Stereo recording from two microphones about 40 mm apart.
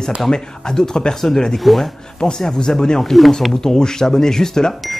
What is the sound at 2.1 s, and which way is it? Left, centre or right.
Speech, centre.